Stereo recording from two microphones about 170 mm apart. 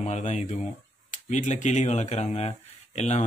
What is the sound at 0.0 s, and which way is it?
Speech, 45° left (ahead or behind).